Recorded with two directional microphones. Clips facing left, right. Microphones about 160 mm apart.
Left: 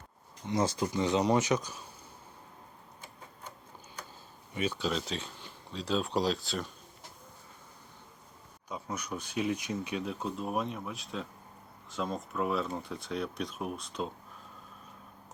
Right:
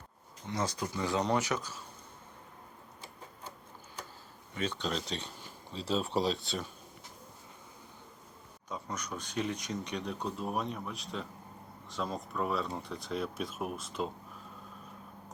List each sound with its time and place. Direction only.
0.4 s speech: 25° left (ahead or behind)
4.5 s speech: 10° left (ahead or behind)
8.7 s speech: 10° left (ahead or behind)